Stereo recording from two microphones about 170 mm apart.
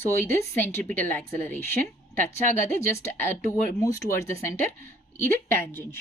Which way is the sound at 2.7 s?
15° left (ahead or behind).